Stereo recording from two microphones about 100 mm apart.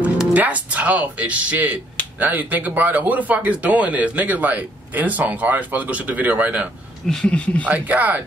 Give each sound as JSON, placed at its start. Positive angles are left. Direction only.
{"t": 0.3, "sound": "speech", "side_deg": -15}
{"t": 7.1, "sound": "speech", "side_deg": 10}
{"t": 7.6, "sound": "speech", "side_deg": -15}